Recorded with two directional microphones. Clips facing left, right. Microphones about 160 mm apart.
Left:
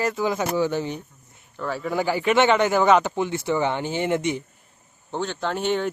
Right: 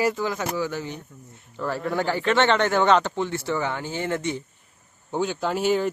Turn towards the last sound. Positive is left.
turn(degrees=-5)  # may be behind; listen again after turning